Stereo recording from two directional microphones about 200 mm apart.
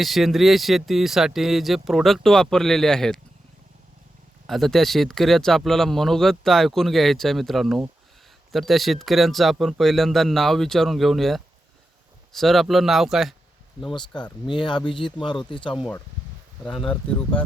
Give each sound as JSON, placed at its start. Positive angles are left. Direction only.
{"t": 0.0, "sound": "speech", "side_deg": 0}
{"t": 4.4, "sound": "speech", "side_deg": 0}
{"t": 13.9, "sound": "speech", "side_deg": 20}
{"t": 16.6, "sound": "speech", "side_deg": 5}